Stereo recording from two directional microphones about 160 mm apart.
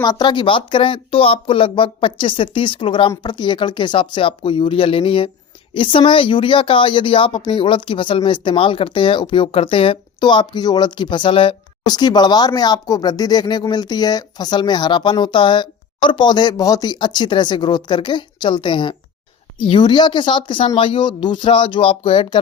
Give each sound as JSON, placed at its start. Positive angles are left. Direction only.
{"t": 0.0, "sound": "speech", "side_deg": 25}